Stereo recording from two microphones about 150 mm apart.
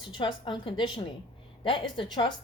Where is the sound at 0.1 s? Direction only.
35° left (ahead or behind).